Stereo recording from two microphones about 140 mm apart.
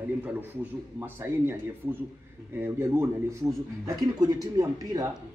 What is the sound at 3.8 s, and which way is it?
Speech, 25° right (ahead or behind).